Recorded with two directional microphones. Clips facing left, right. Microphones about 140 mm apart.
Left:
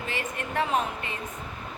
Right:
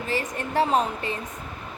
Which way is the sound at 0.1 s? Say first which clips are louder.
Right 6 dB; 35° right (ahead or behind).